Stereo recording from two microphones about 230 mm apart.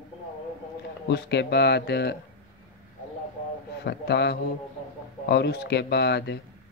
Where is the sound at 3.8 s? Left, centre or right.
Left.